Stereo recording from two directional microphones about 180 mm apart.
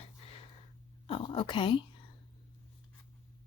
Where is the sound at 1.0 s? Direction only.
30° left (ahead or behind).